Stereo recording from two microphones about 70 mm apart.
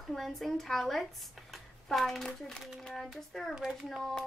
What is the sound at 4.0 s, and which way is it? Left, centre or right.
Speech, centre.